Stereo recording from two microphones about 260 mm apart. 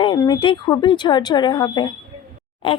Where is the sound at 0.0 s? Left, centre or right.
Centre.